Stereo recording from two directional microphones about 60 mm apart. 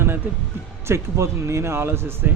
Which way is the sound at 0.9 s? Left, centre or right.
Right.